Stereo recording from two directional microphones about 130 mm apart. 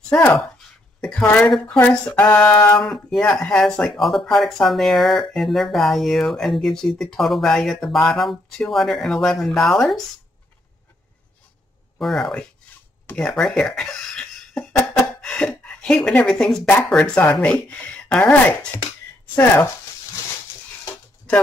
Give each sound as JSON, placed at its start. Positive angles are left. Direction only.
{"t": 1.0, "sound": "speech", "side_deg": 10}
{"t": 12.0, "sound": "speech", "side_deg": 0}
{"t": 19.3, "sound": "speech", "side_deg": 15}